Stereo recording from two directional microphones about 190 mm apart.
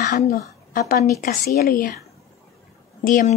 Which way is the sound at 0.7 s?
55° left (ahead or behind).